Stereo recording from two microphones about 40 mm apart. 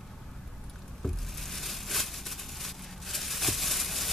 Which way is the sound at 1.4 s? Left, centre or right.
Centre.